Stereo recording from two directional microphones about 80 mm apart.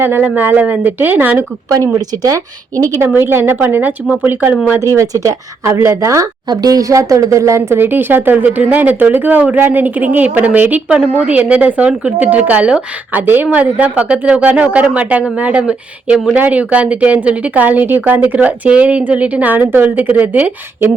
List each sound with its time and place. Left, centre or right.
0.0 s speech: right
2.0 s speech: right
3.2 s speech: right
4.8 s speech: right
6.5 s a woman's voice: right